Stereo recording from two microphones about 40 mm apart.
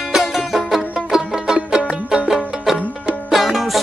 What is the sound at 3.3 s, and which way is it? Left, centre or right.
Music, centre.